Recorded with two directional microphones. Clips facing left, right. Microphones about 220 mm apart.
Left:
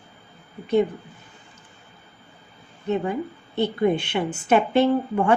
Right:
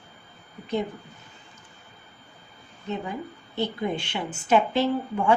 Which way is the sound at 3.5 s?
60° left (ahead or behind).